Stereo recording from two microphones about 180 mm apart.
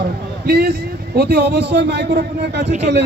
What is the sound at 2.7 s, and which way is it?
Speech, 40° right (ahead or behind).